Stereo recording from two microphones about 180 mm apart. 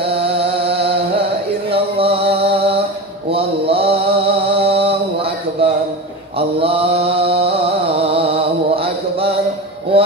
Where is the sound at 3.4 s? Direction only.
30° right (ahead or behind).